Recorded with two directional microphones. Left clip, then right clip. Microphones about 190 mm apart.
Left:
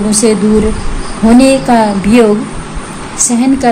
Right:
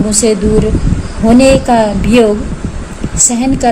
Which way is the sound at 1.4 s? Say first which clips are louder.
Right 1 dB; 40° right (ahead or behind).